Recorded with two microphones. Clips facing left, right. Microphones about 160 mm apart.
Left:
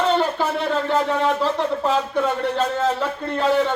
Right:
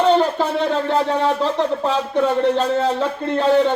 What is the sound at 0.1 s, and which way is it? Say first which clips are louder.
Speech: right 4 dB; 30° right (ahead or behind).